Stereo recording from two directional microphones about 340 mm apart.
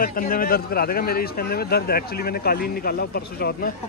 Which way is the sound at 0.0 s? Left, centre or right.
Left.